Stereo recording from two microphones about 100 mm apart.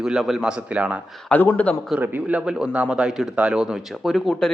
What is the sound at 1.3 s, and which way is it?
Speech, 15° left (ahead or behind).